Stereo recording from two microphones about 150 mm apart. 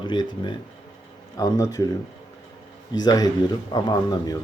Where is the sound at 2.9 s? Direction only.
25° left (ahead or behind).